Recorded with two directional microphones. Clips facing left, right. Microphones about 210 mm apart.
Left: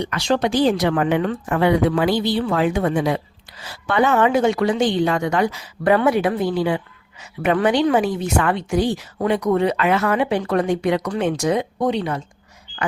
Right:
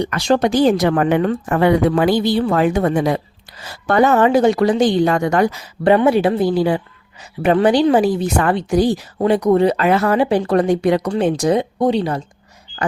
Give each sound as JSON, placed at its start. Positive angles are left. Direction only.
{"t": 0.0, "sound": "a woman's voice", "side_deg": -45}
{"t": 6.1, "sound": "a woman's voice", "side_deg": -30}